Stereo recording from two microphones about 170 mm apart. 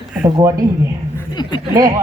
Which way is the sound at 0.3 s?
25° right (ahead or behind).